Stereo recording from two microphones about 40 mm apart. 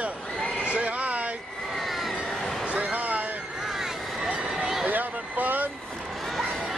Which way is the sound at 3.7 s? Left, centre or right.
Centre.